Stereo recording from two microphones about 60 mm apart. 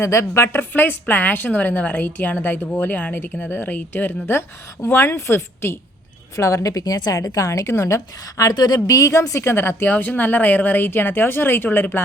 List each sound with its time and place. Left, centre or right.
0.0 s a woman's voice: left
0.7 s a woman's voice: left
6.3 s a woman's voice: left